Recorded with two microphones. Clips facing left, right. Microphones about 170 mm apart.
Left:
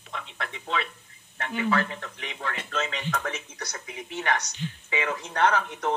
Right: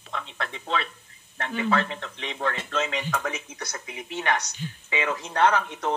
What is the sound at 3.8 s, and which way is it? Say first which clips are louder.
Speech: right 1 dB; 20° right (ahead or behind).